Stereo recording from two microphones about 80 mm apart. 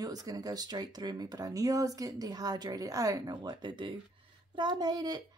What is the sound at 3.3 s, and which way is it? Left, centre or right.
Speech, right.